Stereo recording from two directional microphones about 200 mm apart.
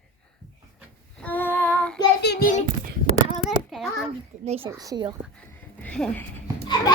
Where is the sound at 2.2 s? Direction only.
50° left (ahead or behind).